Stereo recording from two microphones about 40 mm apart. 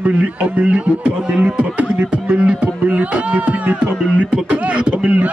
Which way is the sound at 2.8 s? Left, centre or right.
Right.